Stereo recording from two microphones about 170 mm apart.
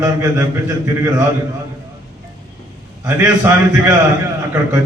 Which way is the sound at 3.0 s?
10° right (ahead or behind).